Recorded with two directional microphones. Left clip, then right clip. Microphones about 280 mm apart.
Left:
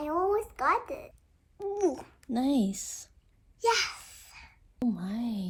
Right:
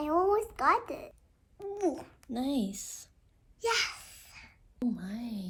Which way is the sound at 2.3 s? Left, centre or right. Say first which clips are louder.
Left 5 dB; left.